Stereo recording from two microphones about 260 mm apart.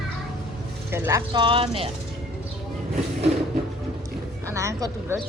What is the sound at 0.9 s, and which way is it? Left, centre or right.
A woman's voice, centre.